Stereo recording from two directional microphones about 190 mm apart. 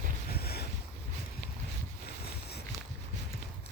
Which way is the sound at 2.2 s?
55° left (ahead or behind).